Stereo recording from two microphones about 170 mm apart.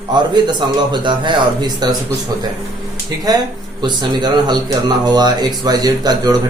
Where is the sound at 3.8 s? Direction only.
25° right (ahead or behind).